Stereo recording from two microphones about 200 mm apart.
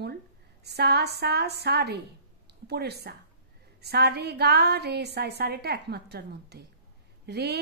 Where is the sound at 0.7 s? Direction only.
55° right (ahead or behind).